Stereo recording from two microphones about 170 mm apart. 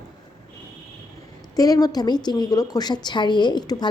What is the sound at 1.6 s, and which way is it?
A woman's voice, 20° left (ahead or behind).